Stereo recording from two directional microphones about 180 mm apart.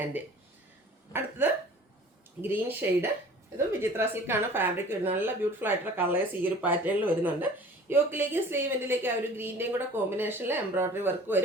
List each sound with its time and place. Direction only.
1.1 s a woman's voice: 10° right (ahead or behind)